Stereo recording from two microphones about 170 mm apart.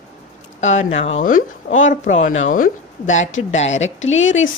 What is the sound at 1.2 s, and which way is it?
A woman's voice, 50° left (ahead or behind).